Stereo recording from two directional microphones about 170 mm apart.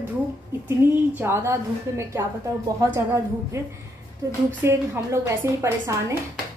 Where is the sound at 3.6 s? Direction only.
15° right (ahead or behind).